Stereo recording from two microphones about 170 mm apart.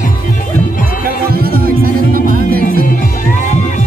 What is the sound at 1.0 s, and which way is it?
Music, 60° right (ahead or behind).